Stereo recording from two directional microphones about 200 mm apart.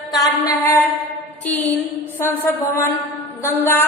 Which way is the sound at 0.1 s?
20° left (ahead or behind).